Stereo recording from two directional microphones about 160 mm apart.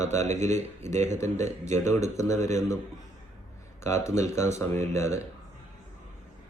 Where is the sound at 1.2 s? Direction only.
45° right (ahead or behind).